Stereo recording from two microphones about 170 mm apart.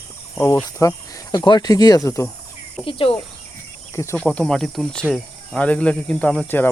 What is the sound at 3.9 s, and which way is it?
Speech, 10° left (ahead or behind).